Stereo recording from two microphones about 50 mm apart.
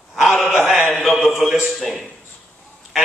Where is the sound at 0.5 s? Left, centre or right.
Centre.